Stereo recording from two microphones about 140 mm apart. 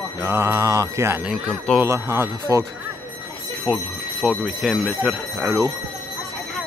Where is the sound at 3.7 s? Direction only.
10° right (ahead or behind).